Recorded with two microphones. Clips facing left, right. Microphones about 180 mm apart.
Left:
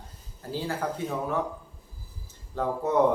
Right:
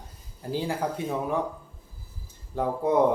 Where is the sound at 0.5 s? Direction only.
15° right (ahead or behind).